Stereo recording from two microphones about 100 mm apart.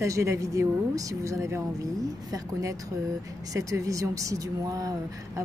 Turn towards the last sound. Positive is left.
turn(degrees=-35)  # may be behind; listen again after turning